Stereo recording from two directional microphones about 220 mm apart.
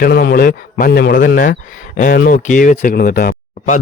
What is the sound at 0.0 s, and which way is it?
A man's voice, 45° left (ahead or behind).